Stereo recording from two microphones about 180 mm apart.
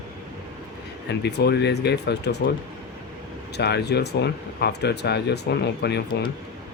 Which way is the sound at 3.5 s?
70° left (ahead or behind).